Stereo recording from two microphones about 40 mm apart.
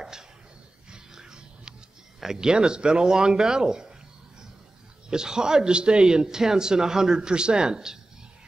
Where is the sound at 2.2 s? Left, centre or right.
Centre.